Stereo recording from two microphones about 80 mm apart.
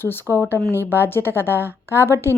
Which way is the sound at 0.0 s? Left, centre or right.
Left.